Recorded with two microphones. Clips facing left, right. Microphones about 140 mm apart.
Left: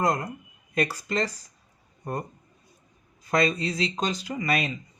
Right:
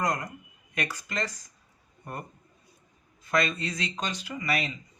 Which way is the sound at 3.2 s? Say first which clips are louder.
Left 4 dB; 35° left (ahead or behind).